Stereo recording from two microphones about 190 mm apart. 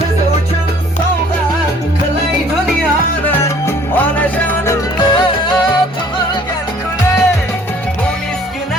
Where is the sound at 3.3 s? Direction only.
15° left (ahead or behind).